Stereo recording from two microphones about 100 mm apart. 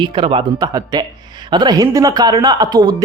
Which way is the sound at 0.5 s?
40° right (ahead or behind).